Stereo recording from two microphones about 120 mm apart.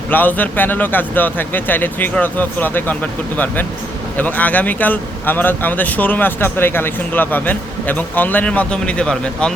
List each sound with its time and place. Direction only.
0.1 s speech: 15° left (ahead or behind)